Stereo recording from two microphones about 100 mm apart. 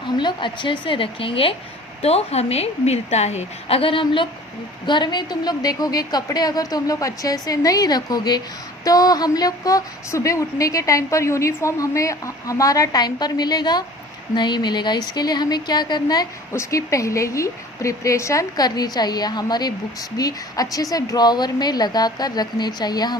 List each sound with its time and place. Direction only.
0.2 s a woman's voice: 50° left (ahead or behind)
2.0 s a woman's voice: 90° left; by 16.2 s 45° left (ahead or behind)
16.5 s a woman's voice: 30° left (ahead or behind)